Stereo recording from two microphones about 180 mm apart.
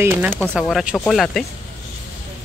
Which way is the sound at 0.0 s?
10° right (ahead or behind).